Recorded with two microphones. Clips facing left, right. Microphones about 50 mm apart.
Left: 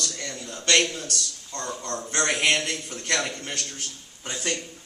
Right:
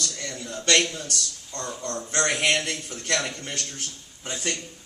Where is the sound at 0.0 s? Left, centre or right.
Centre.